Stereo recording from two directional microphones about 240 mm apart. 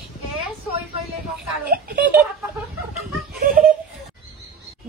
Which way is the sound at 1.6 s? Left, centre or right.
Right.